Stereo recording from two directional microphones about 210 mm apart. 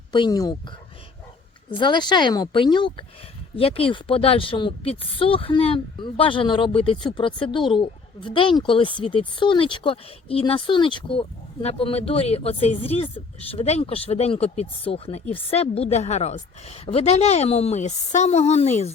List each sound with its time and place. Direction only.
0.1 s speech: 20° left (ahead or behind)
1.8 s speech: 20° left (ahead or behind)